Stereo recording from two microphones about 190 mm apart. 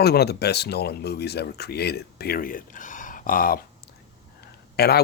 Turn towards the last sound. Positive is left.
turn(degrees=55)  # may be behind; listen again after turning